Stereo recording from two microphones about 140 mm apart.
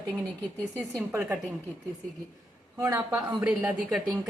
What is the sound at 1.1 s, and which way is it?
Speech, 10° right (ahead or behind).